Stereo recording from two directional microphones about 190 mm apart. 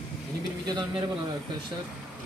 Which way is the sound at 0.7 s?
20° right (ahead or behind).